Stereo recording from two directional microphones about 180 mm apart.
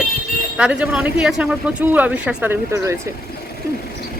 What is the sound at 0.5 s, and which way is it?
Speech, 5° right (ahead or behind).